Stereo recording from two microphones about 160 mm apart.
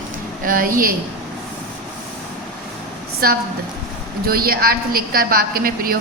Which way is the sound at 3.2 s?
70° right (ahead or behind).